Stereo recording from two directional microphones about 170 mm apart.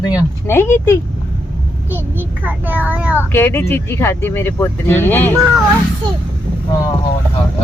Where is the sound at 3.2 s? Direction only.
10° left (ahead or behind).